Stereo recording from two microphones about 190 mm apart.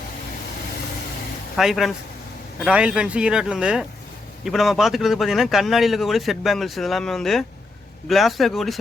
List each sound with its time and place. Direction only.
1.5 s a man's voice: centre (ahead or behind)